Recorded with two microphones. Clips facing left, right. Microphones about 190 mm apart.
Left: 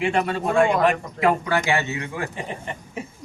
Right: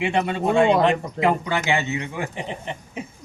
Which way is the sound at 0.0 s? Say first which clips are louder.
Even; 15° right (ahead or behind).